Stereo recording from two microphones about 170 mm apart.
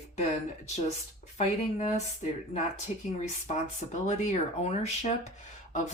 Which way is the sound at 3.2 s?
45° left (ahead or behind).